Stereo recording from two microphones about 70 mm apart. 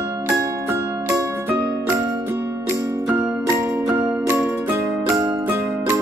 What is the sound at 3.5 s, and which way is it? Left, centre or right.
Music, right.